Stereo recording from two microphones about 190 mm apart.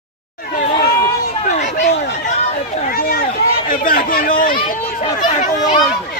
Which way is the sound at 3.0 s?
50° left (ahead or behind).